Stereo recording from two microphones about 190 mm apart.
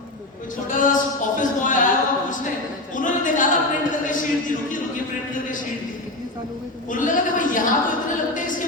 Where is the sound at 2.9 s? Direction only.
45° left (ahead or behind).